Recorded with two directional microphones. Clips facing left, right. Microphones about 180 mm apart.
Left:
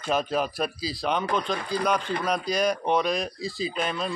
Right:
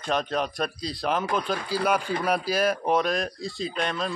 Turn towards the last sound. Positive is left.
turn(degrees=0)  # may be behind; listen again after turning